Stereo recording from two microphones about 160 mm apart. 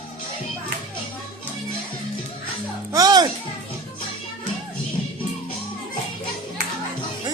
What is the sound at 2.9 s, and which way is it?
Music, 20° right (ahead or behind).